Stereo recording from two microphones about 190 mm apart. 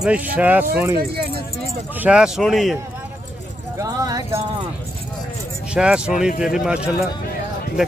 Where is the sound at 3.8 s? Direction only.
20° right (ahead or behind).